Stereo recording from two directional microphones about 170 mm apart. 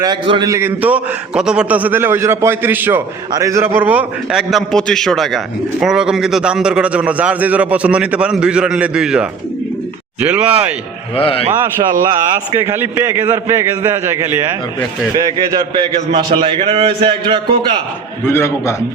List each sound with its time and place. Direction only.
0.0 s a man's voice: 25° right (ahead or behind); by 10.7 s 10° right (ahead or behind)
11.2 s a man's voice: 35° left (ahead or behind)
12.6 s a man's voice: 15° right (ahead or behind)
15.1 s a man's voice: 25° right (ahead or behind)
18.3 s a man's voice: 15° left (ahead or behind)